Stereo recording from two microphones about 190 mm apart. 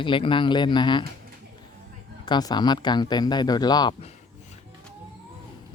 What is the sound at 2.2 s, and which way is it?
Speech, 20° left (ahead or behind).